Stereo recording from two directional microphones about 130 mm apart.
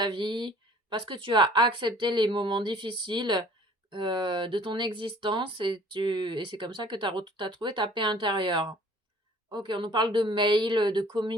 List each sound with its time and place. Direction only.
0.0 s speech: 35° right (ahead or behind)